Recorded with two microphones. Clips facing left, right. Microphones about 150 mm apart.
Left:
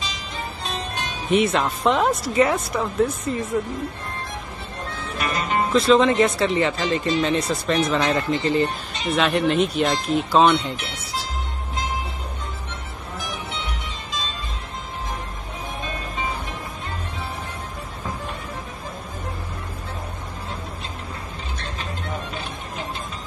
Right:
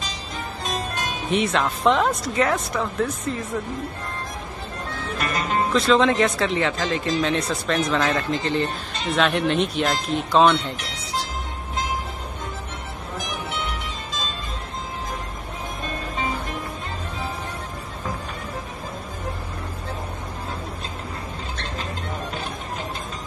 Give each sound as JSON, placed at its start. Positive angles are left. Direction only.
{"t": 1.3, "sound": "speech", "side_deg": 0}
{"t": 5.7, "sound": "speech", "side_deg": 0}